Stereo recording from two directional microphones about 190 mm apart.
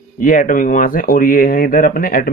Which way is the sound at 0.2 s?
45° left (ahead or behind).